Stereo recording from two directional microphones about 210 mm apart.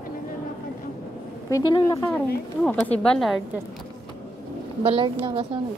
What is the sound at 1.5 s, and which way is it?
A woman's voice, 15° left (ahead or behind).